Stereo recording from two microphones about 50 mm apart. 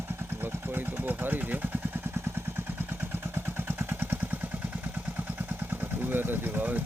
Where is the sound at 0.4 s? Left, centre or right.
Right.